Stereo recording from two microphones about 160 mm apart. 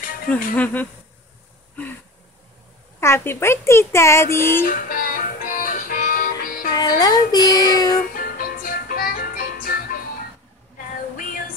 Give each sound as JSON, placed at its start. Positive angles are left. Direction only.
{"t": 0.3, "sound": "speech", "side_deg": 10}
{"t": 3.0, "sound": "speech", "side_deg": 15}
{"t": 4.6, "sound": "music", "side_deg": 60}
{"t": 6.8, "sound": "speech", "side_deg": 25}
{"t": 8.2, "sound": "music", "side_deg": 65}